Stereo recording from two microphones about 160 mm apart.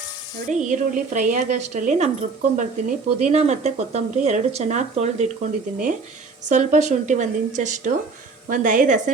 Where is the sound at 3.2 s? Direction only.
45° right (ahead or behind).